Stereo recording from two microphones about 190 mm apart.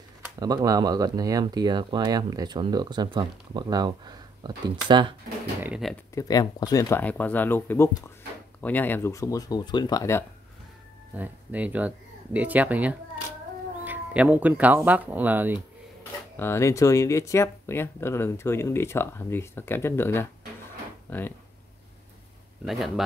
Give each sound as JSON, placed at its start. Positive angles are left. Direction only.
{"t": 0.4, "sound": "speech", "side_deg": -20}
{"t": 5.6, "sound": "speech", "side_deg": -5}
{"t": 6.1, "sound": "speech", "side_deg": 20}
{"t": 11.1, "sound": "speech", "side_deg": -10}
{"t": 16.3, "sound": "speech", "side_deg": 15}
{"t": 22.7, "sound": "speech", "side_deg": 0}